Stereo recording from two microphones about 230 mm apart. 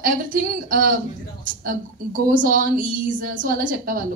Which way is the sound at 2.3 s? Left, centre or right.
Right.